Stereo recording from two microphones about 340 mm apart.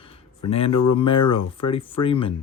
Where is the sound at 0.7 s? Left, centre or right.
Left.